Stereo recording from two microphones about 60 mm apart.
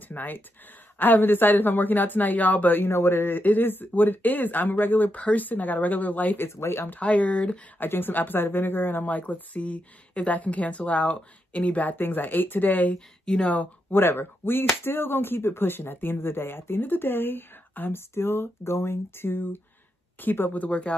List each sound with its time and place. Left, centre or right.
0.1 s speech: left
6.4 s speech: left
6.9 s speech: left
7.8 s speech: left
12.9 s speech: centre
13.9 s speech: left
20.6 s speech: left